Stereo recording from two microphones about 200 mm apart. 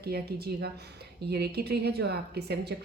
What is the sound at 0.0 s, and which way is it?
A woman's voice, 50° right (ahead or behind).